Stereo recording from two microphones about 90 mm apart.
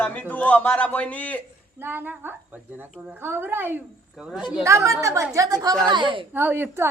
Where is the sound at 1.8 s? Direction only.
25° right (ahead or behind).